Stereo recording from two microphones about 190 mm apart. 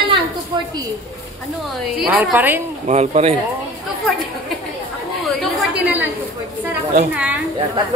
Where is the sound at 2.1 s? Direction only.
10° right (ahead or behind).